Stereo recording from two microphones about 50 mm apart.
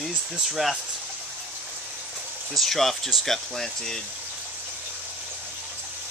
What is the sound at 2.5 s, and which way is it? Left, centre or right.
Speech, centre.